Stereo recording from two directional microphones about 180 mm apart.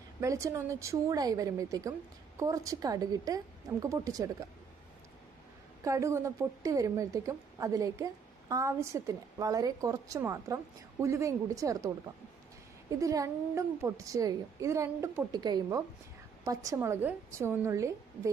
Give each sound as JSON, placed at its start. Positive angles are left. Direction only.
{"t": 0.2, "sound": "a woman's voice", "side_deg": -15}
{"t": 5.8, "sound": "a woman's voice", "side_deg": -15}
{"t": 13.0, "sound": "a woman's voice", "side_deg": -20}